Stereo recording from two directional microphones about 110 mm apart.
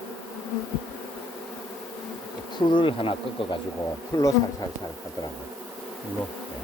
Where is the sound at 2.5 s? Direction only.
45° left (ahead or behind).